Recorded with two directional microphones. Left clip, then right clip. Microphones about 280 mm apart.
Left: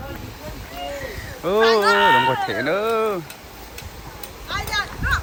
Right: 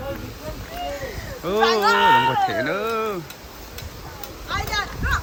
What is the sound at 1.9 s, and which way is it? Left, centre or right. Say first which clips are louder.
Run: left 1 dB; right.